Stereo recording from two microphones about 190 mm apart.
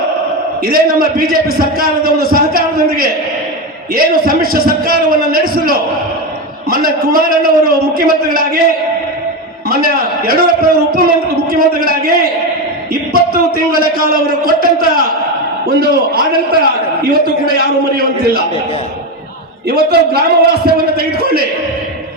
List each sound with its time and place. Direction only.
0.6 s a man's voice: 50° right (ahead or behind)
9.6 s a man's voice: 50° right (ahead or behind)
19.6 s a man's voice: 55° right (ahead or behind)